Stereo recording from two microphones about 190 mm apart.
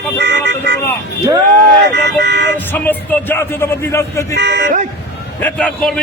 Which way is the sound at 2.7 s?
10° left (ahead or behind).